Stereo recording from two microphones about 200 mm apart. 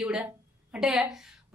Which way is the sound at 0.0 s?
5° right (ahead or behind).